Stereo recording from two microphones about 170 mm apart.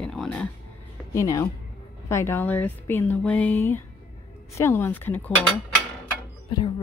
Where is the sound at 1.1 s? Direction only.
20° left (ahead or behind).